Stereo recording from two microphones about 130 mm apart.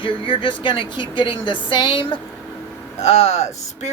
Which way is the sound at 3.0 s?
55° left (ahead or behind).